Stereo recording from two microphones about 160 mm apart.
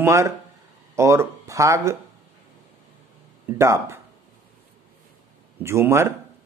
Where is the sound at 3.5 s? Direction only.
15° right (ahead or behind).